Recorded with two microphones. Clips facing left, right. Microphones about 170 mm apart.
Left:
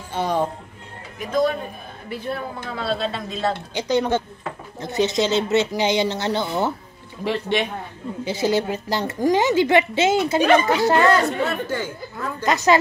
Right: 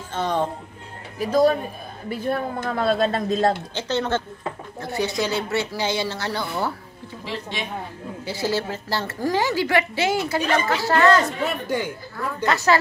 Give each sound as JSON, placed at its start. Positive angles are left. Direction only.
{"t": 0.1, "sound": "speech", "side_deg": 10}
{"t": 1.2, "sound": "speech", "side_deg": -35}
{"t": 2.2, "sound": "speech", "side_deg": -45}
{"t": 3.7, "sound": "a woman's voice", "side_deg": 15}
{"t": 7.2, "sound": "a man's voice", "side_deg": 65}
{"t": 8.3, "sound": "a woman's voice", "side_deg": 20}
{"t": 11.4, "sound": "speech", "side_deg": -15}
{"t": 12.4, "sound": "a woman's voice", "side_deg": 20}